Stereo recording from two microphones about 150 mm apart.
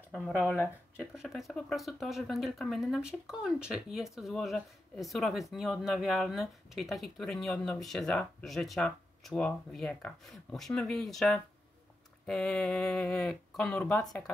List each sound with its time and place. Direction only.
0.1 s speech: 10° left (ahead or behind)
1.1 s speech: 5° right (ahead or behind)